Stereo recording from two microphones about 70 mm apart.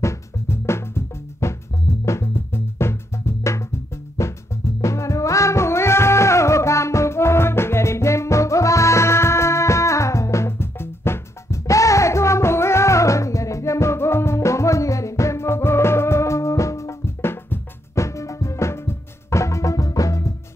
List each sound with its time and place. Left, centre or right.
0.0 s music: left